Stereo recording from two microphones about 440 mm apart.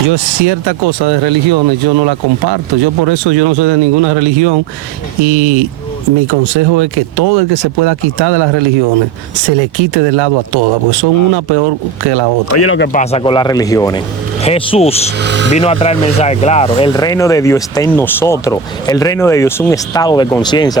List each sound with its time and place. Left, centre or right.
0.1 s speech: right
12.5 s speech: left; by 15.1 s centre
15.2 s speech: right
15.5 s speech: centre